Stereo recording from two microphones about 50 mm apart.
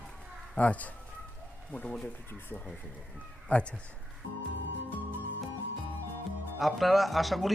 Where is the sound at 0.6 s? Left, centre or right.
Left.